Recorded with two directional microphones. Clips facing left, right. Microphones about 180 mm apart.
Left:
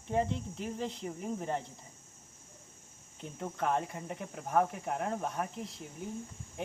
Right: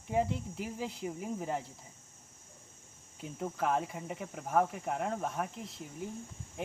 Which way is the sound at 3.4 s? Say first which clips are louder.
Even; centre (ahead or behind).